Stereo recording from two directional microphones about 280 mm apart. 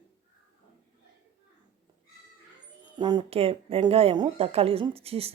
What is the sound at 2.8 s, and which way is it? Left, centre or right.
A woman's voice, centre.